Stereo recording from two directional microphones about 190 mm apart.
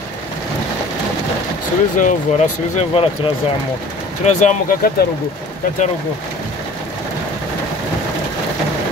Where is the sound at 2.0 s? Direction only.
40° left (ahead or behind).